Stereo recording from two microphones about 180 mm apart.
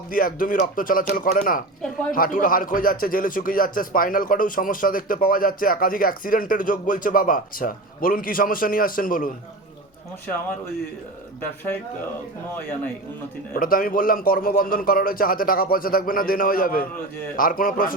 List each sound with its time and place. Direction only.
0.1 s speech: 50° left (ahead or behind)
11.3 s speech: 10° left (ahead or behind)
13.5 s speech: 50° left (ahead or behind)